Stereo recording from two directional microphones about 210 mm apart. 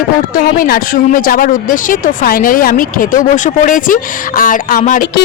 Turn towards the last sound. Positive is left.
turn(degrees=40)  # may be behind; listen again after turning